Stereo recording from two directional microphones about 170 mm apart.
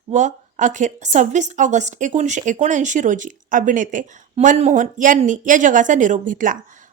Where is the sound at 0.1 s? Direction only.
45° right (ahead or behind).